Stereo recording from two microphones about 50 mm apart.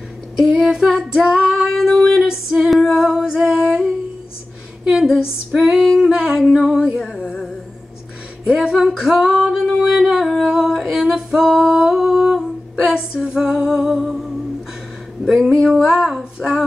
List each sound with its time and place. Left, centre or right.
0.4 s female singing: centre
1.8 s music: centre
2.7 s singing: centre
4.8 s a woman's voice: centre
5.6 s a sound: centre
5.9 s female singing: centre
6.4 s a sound: centre
6.8 s music: centre
8.5 s female singing: centre
9.4 s music: centre
10.1 s singing: centre
12.8 s female singing: centre
13.5 s female singing: centre
15.5 s a sound: centre